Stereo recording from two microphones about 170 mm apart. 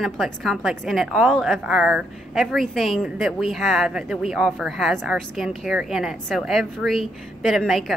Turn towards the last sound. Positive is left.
turn(degrees=0)  # may be behind; listen again after turning